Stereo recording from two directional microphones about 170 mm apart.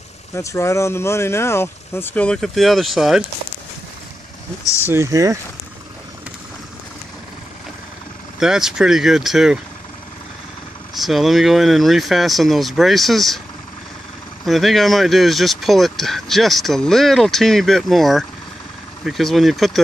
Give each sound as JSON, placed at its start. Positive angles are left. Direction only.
{"t": 0.3, "sound": "speech", "side_deg": 20}
{"t": 4.6, "sound": "speech", "side_deg": 15}
{"t": 4.9, "sound": "speech", "side_deg": -20}
{"t": 8.4, "sound": "speech", "side_deg": -5}
{"t": 11.0, "sound": "speech", "side_deg": 0}
{"t": 14.4, "sound": "speech", "side_deg": 0}